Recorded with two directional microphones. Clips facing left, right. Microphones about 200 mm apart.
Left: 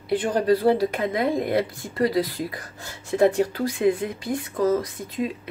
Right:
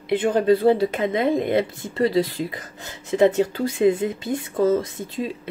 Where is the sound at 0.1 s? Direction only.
25° right (ahead or behind).